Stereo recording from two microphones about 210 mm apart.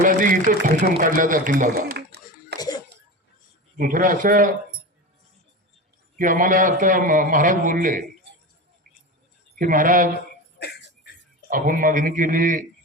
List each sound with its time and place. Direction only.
0.0 s a man's voice: 40° right (ahead or behind)
3.8 s a man's voice: 40° right (ahead or behind)
6.1 s a man's voice: 40° right (ahead or behind)
9.6 s a man's voice: 40° right (ahead or behind)
11.4 s a man's voice: 40° right (ahead or behind)